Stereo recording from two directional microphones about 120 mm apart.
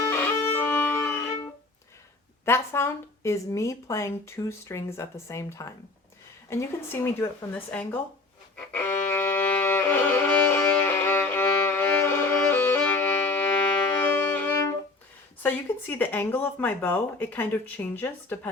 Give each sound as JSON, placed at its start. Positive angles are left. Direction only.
{"t": 0.1, "sound": "music", "side_deg": 15}
{"t": 2.4, "sound": "speech", "side_deg": 20}
{"t": 8.5, "sound": "music", "side_deg": 15}
{"t": 15.4, "sound": "speech", "side_deg": 15}